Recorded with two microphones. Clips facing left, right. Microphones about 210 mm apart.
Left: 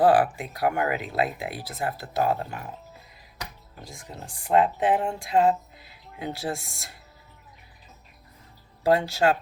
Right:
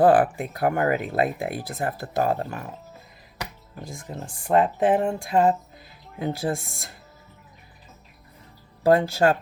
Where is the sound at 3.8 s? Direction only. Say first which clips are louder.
Right 5 dB; 50° right (ahead or behind).